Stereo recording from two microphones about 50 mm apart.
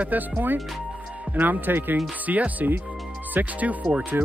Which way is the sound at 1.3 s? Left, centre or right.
Right.